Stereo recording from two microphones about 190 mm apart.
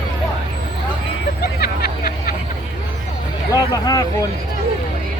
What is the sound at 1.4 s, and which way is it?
Vehicle, 55° left (ahead or behind).